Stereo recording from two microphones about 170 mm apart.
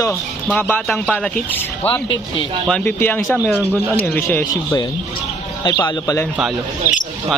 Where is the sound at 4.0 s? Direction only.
15° left (ahead or behind).